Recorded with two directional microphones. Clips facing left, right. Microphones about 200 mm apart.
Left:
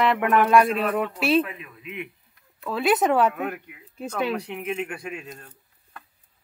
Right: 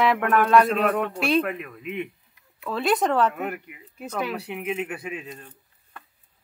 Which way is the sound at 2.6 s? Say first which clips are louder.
Left 1 dB; centre (ahead or behind).